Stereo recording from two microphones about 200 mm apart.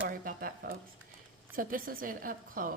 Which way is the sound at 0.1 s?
45° right (ahead or behind).